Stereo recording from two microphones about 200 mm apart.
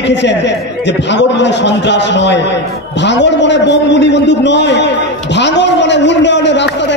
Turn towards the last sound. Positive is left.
turn(degrees=60)  # may be behind; listen again after turning